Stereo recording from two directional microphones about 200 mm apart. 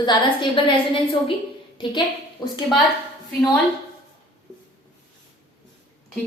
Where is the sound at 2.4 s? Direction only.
20° left (ahead or behind).